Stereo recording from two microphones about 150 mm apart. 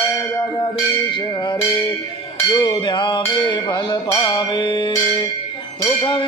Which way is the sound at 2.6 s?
30° left (ahead or behind).